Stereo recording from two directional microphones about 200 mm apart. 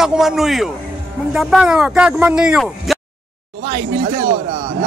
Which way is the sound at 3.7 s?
30° right (ahead or behind).